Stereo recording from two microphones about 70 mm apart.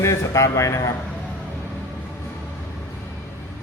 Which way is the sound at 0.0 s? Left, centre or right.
Left.